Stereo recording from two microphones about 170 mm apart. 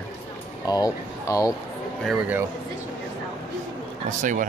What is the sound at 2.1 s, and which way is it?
Speech, 10° right (ahead or behind).